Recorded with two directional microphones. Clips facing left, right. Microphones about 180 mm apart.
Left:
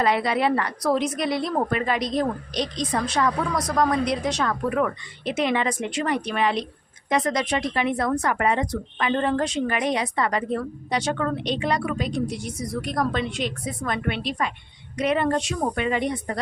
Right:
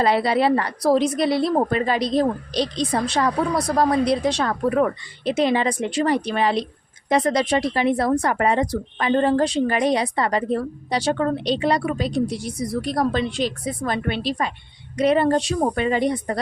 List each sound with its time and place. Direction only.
0.0 s a woman's voice: 30° right (ahead or behind)